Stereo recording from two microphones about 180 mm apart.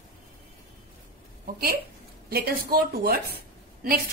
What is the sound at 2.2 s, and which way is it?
A woman's voice, 60° right (ahead or behind).